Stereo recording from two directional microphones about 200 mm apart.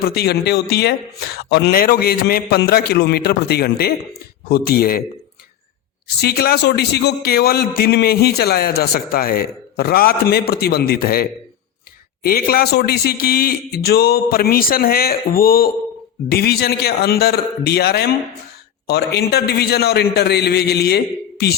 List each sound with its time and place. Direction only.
0.0 s a man's voice: 55° left (ahead or behind)
6.1 s a man's voice: 50° left (ahead or behind)